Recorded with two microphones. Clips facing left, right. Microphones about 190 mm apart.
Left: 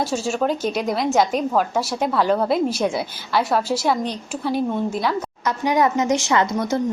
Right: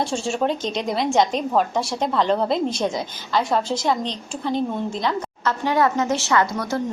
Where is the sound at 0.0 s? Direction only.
5° left (ahead or behind).